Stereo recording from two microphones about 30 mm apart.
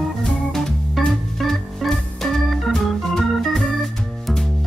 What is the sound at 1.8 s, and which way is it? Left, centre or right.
Organ, centre.